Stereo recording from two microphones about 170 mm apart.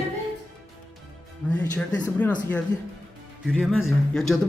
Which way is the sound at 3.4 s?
Centre (ahead or behind).